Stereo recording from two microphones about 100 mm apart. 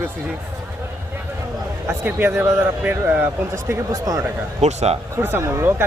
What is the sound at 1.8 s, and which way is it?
Speech, 25° right (ahead or behind).